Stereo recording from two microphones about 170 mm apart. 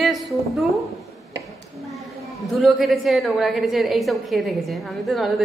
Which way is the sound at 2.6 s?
Centre (ahead or behind).